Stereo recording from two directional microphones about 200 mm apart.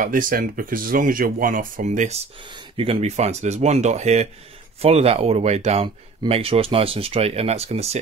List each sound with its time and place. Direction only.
0.0 s speech: 45° right (ahead or behind)